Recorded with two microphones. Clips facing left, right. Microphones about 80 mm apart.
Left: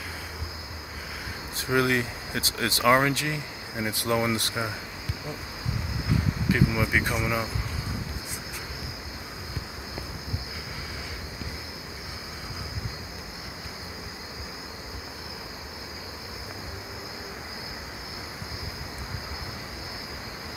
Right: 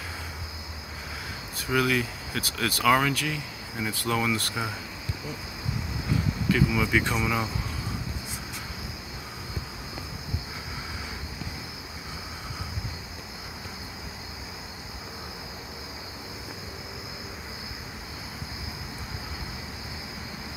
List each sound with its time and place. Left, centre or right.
1.7 s speech: left
6.5 s cricket: centre